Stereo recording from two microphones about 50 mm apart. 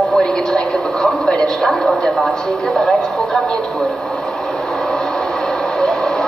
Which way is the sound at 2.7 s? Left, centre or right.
Centre.